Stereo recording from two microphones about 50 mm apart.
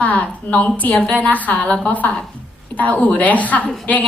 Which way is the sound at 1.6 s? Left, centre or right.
Centre.